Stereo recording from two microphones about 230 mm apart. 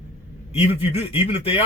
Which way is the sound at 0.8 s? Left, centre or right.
Left.